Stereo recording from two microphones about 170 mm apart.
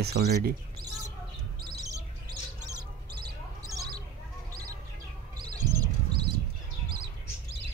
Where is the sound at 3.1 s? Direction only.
70° right (ahead or behind).